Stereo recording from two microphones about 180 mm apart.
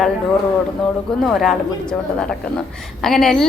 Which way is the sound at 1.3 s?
5° left (ahead or behind).